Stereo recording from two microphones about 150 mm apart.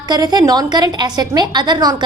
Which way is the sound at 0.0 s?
25° right (ahead or behind).